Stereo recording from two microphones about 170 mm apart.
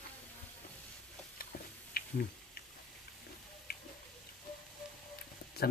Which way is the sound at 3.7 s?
65° left (ahead or behind).